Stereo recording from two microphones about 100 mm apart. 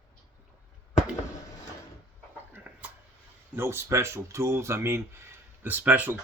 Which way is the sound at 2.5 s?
15° right (ahead or behind).